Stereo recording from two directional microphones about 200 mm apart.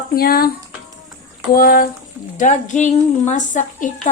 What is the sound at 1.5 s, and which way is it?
A woman's voice, 45° left (ahead or behind).